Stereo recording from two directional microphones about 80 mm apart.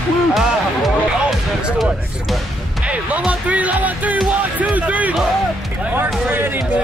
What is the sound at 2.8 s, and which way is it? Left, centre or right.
Speech, centre.